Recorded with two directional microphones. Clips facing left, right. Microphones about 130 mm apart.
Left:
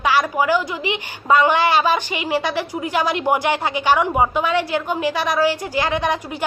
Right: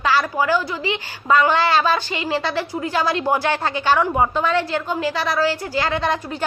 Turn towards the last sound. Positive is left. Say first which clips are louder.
# left 1 dB
turn(degrees=15)  # may be behind; listen again after turning